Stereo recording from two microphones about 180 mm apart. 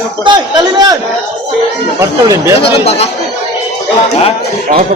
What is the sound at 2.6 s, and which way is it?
Speech, 35° left (ahead or behind).